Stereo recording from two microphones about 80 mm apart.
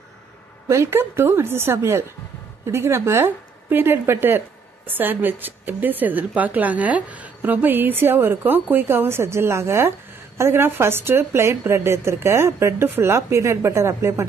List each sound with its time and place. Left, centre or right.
0.7 s a woman's voice: right